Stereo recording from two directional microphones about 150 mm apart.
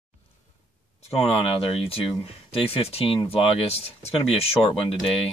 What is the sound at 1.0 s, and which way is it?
Speech, 40° left (ahead or behind).